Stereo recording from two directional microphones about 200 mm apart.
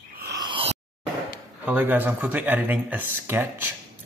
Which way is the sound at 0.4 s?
25° right (ahead or behind).